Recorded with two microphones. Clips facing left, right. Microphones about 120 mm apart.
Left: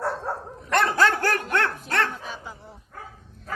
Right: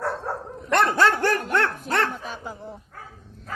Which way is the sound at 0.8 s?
Centre (ahead or behind).